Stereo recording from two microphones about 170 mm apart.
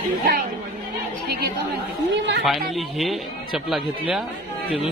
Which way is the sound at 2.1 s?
90° right.